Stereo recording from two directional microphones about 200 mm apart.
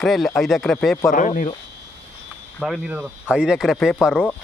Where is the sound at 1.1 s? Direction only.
40° left (ahead or behind).